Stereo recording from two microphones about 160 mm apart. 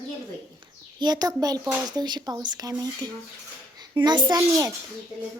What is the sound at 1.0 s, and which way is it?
A child's voice, 25° right (ahead or behind).